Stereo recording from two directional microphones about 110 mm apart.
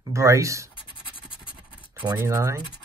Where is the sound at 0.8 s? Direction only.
50° left (ahead or behind).